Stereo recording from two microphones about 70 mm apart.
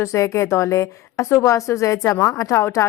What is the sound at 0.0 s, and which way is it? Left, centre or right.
Speech, left.